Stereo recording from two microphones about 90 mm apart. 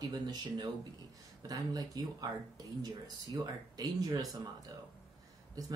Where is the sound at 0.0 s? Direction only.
50° right (ahead or behind).